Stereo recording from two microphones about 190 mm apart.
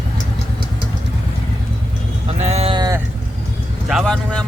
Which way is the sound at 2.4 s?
35° right (ahead or behind).